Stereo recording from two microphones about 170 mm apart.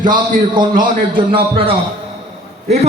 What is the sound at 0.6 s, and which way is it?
Speech, 25° right (ahead or behind).